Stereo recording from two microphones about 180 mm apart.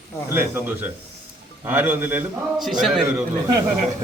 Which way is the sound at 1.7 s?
10° right (ahead or behind).